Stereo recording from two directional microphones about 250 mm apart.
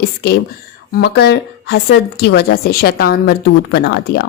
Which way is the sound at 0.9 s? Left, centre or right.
Left.